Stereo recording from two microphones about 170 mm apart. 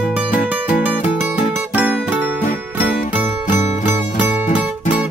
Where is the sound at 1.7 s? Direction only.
10° right (ahead or behind).